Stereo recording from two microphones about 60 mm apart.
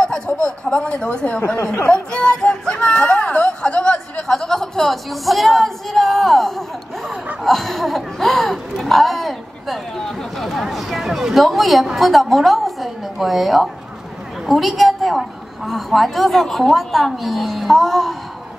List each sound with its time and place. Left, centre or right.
0.3 s speech: left
0.7 s speech: centre
4.3 s speech: centre